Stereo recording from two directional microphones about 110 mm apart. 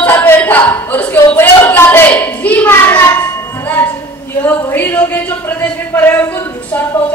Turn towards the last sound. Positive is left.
turn(degrees=20)  # may be behind; listen again after turning